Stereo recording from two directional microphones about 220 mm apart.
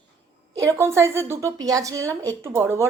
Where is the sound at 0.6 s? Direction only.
10° right (ahead or behind).